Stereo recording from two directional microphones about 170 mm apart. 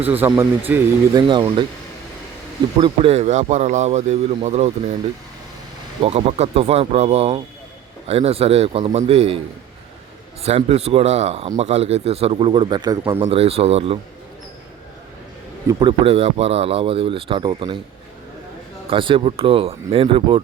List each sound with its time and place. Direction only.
0.2 s speech: 15° right (ahead or behind)
1.1 s speech: 25° right (ahead or behind)
2.8 s speech: 35° right (ahead or behind)
6.0 s speech: 35° right (ahead or behind)
10.4 s speech: 40° right (ahead or behind); by 13.1 s 20° right (ahead or behind)
13.1 s speech: 35° right (ahead or behind)
15.6 s speech: 30° right (ahead or behind)
18.9 s speech: 30° right (ahead or behind)